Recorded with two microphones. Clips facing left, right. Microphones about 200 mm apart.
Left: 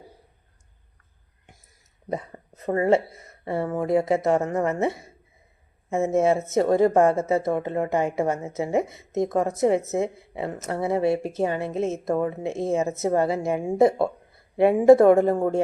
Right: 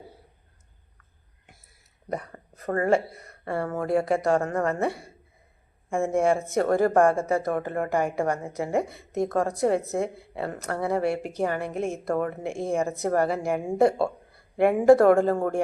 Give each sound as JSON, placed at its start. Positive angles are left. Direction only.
{"t": 2.0, "sound": "speech", "side_deg": 20}